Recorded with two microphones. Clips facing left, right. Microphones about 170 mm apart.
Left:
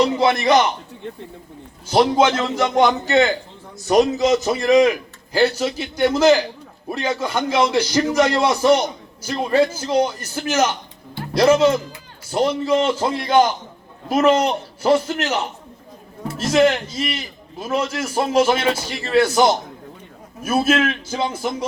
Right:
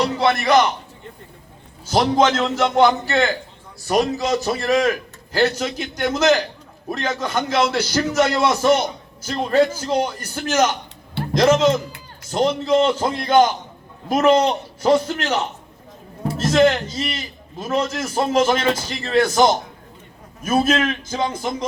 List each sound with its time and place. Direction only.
0.2 s a man's voice: 15° left (ahead or behind)
1.9 s a man's voice: 10° left (ahead or behind)
16.4 s a man's voice: 10° left (ahead or behind)